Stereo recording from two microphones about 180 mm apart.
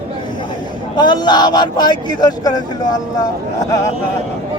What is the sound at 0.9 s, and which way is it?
Speech, 25° left (ahead or behind).